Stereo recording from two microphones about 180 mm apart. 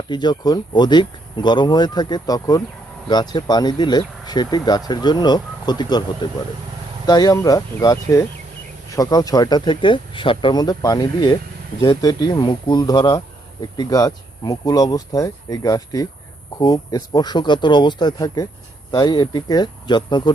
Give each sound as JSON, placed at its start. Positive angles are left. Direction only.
{"t": 0.1, "sound": "speech", "side_deg": 25}
{"t": 7.1, "sound": "speech", "side_deg": 20}